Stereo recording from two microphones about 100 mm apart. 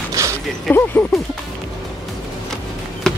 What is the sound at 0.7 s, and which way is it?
Speech, 20° left (ahead or behind).